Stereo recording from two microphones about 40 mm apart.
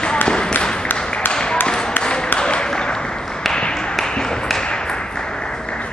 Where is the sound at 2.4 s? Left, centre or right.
Left.